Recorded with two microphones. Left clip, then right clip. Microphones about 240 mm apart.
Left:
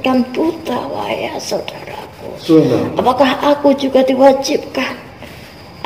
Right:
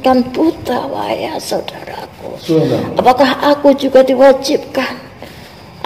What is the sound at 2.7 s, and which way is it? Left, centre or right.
A woman's voice, right.